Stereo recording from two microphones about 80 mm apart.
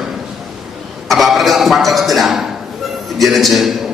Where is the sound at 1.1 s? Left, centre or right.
Centre.